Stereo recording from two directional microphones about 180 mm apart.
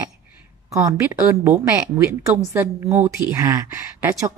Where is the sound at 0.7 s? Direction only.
20° right (ahead or behind).